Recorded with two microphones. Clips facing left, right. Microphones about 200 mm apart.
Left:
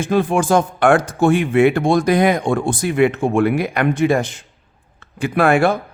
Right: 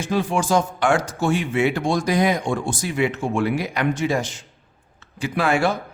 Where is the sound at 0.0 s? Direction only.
55° left (ahead or behind).